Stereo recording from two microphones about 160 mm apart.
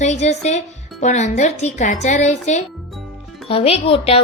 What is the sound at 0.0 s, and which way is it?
A woman's voice, 45° left (ahead or behind).